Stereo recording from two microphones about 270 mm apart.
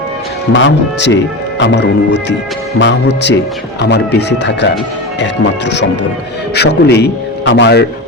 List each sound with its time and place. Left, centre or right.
0.5 s speech: left